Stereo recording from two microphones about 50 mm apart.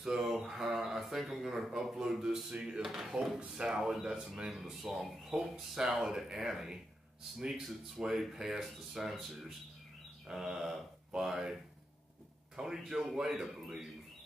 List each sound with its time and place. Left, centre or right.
0.2 s a sound: centre
2.6 s speech: centre
3.3 s speech: centre
10.2 s speech: centre
12.5 s speech: centre